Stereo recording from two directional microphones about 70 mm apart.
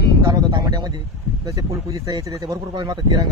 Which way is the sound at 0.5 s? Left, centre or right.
Right.